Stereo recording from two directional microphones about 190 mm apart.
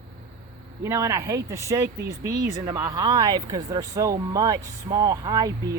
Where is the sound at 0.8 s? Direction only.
15° right (ahead or behind).